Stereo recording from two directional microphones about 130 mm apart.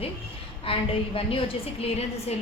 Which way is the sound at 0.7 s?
45° left (ahead or behind).